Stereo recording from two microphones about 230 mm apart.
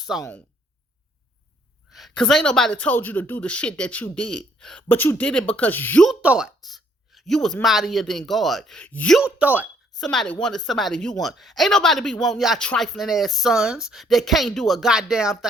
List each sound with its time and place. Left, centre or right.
0.2 s speech: centre
1.9 s speech: centre